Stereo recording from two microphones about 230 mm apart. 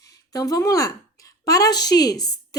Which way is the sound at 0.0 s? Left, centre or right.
Centre.